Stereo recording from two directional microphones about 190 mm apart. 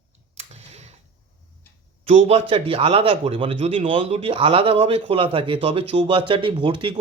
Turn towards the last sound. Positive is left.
turn(degrees=-25)  # may be behind; listen again after turning